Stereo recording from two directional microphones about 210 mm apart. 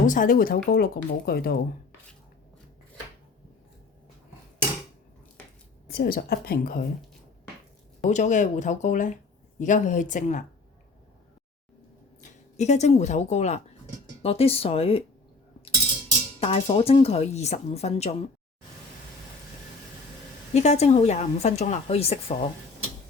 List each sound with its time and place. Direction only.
0.0 s speech: 40° left (ahead or behind)
5.9 s speech: 45° left (ahead or behind)
8.0 s a woman's voice: 35° left (ahead or behind)
12.2 s a woman's voice: 35° left (ahead or behind)
16.4 s a woman's voice: 30° left (ahead or behind)
20.5 s a woman's voice: 30° left (ahead or behind)